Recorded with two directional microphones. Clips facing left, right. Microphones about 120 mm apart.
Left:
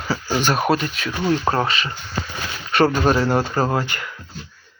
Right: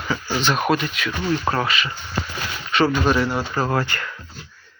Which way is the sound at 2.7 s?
45° left (ahead or behind).